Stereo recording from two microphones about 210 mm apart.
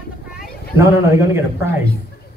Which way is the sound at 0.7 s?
15° right (ahead or behind).